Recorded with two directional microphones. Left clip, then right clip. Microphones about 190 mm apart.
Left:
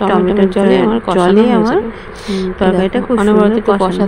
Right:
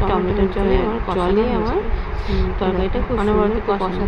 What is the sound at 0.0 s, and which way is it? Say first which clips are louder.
A woman's voice: left 7 dB; 35° left (ahead or behind).